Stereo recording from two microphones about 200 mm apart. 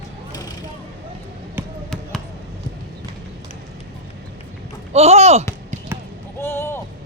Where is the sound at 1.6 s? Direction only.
10° right (ahead or behind).